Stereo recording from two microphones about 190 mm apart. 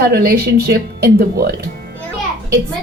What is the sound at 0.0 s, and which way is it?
Speech, 55° right (ahead or behind).